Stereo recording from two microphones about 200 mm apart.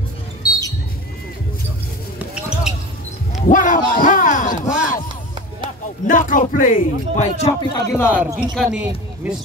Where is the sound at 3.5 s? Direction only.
40° left (ahead or behind).